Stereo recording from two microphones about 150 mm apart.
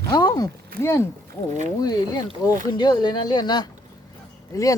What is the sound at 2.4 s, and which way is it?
Speech, 30° left (ahead or behind).